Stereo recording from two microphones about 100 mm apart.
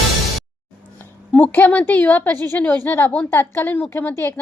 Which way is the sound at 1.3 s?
15° left (ahead or behind).